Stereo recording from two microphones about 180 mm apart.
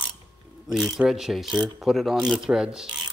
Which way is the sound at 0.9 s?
Centre (ahead or behind).